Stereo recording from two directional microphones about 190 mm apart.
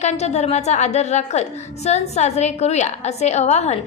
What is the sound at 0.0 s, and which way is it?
A woman's voice, 35° left (ahead or behind).